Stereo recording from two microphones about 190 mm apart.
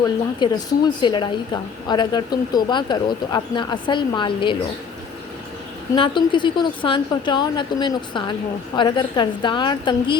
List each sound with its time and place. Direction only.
0.3 s a woman's voice: 20° left (ahead or behind)
6.0 s a woman's voice: 25° left (ahead or behind)